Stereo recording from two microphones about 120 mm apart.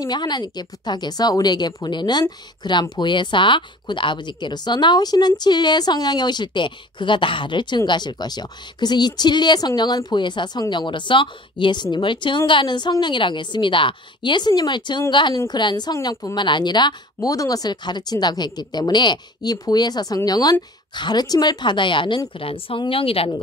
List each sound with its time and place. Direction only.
0.0 s a woman's voice: 35° left (ahead or behind)